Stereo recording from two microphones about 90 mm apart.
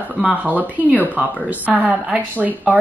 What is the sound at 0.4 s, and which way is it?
Speech, 15° right (ahead or behind).